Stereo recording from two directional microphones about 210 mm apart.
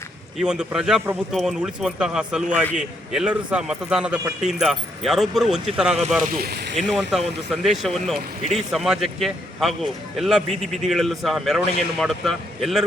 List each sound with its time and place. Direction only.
0.3 s a man's voice: 5° right (ahead or behind)
6.2 s speech: 45° right (ahead or behind)
6.7 s a man's voice: centre (ahead or behind)